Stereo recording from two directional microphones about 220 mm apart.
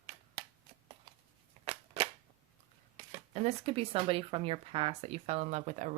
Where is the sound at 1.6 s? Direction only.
30° right (ahead or behind).